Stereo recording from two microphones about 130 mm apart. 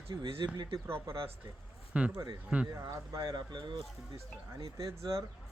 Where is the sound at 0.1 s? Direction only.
35° right (ahead or behind).